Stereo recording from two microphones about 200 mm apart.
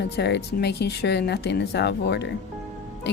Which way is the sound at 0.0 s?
60° left (ahead or behind).